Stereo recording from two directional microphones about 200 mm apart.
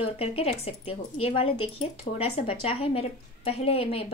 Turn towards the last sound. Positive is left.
turn(degrees=30)  # may be behind; listen again after turning